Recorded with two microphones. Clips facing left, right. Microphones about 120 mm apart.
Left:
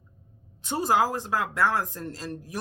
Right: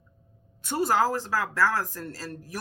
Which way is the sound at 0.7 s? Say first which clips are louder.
Even; 15° left (ahead or behind).